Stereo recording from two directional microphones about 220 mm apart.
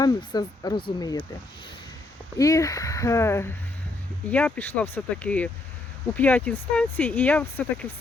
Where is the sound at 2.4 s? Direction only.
15° left (ahead or behind).